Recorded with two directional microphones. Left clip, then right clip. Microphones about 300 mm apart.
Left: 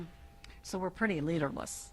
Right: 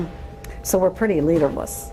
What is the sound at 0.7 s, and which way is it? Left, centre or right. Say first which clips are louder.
Speech: right 16 dB; left.